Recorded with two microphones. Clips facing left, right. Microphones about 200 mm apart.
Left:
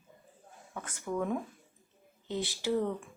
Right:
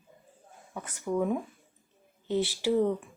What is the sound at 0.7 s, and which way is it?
Speech, 15° right (ahead or behind).